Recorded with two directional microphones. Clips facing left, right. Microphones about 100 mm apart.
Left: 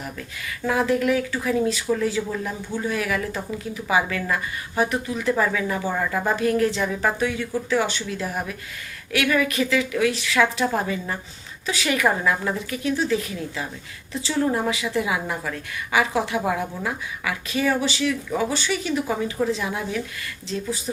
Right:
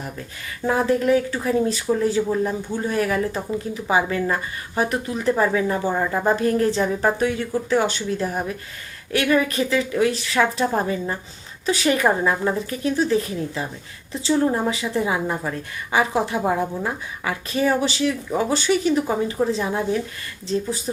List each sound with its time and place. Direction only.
0.2 s speech: 30° right (ahead or behind)